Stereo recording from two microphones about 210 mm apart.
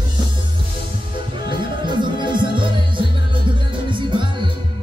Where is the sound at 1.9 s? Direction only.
20° right (ahead or behind).